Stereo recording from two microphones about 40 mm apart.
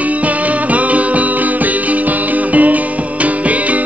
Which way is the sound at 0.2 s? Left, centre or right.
Right.